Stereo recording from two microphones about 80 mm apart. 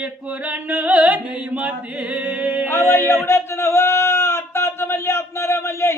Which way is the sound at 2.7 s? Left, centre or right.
Left.